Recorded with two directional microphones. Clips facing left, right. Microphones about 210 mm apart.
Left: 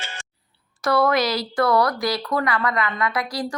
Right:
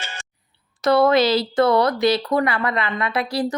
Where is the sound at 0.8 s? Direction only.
25° right (ahead or behind).